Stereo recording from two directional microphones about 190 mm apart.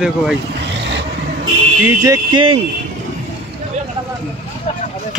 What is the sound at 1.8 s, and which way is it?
Music, 20° right (ahead or behind).